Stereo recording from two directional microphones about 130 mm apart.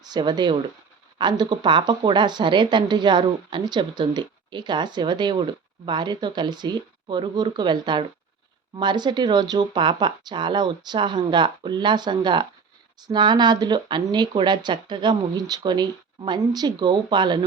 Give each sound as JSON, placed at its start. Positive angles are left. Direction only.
{"t": 0.0, "sound": "a woman's voice", "side_deg": -35}